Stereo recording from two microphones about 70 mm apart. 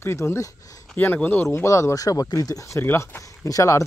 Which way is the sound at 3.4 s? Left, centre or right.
Left.